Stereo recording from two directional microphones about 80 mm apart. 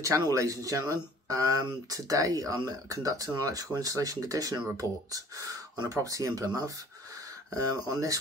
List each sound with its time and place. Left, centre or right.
0.2 s speech: right